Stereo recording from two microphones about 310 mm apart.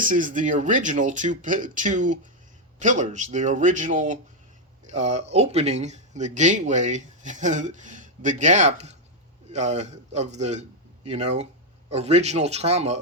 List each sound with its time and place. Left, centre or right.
0.0 s a man's voice: right